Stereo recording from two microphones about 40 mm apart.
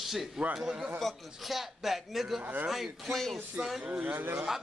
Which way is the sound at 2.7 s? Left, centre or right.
Centre.